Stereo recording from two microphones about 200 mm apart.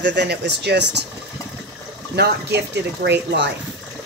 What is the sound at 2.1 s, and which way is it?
Speech, 55° right (ahead or behind).